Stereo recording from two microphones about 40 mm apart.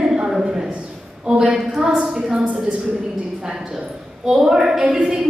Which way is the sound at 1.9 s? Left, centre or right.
Right.